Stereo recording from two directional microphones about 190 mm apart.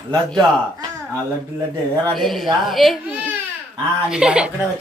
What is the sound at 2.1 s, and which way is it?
Speech, centre (ahead or behind).